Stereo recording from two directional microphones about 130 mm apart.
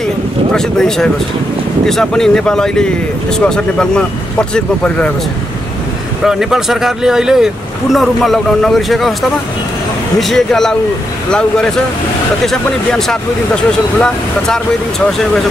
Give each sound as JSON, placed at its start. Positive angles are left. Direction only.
{"t": 0.5, "sound": "speech", "side_deg": 5}
{"t": 6.2, "sound": "speech", "side_deg": -5}
{"t": 10.2, "sound": "speech", "side_deg": 5}